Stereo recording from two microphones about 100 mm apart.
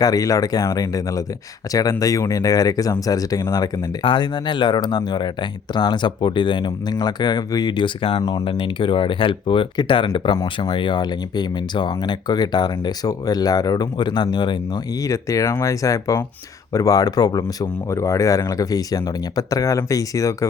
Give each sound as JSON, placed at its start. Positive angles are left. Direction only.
{"t": 0.0, "sound": "speech", "side_deg": 35}
{"t": 4.0, "sound": "speech", "side_deg": 55}
{"t": 15.0, "sound": "speech", "side_deg": 35}